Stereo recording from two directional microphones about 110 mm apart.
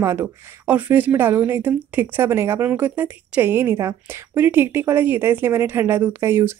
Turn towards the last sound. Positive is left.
turn(degrees=-25)  # may be behind; listen again after turning